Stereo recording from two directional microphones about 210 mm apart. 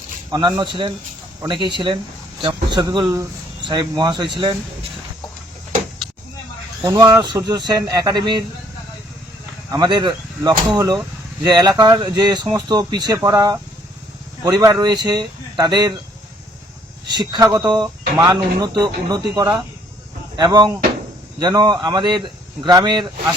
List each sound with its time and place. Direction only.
0.3 s speech: 20° right (ahead or behind)
6.8 s speech: 15° right (ahead or behind)
9.6 s speech: 20° right (ahead or behind)
17.1 s speech: 20° right (ahead or behind)